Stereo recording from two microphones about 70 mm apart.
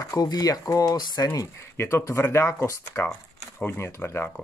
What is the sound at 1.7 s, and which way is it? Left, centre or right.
Speech, left.